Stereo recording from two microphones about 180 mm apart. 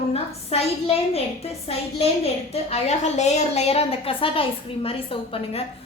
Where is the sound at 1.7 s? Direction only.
35° left (ahead or behind).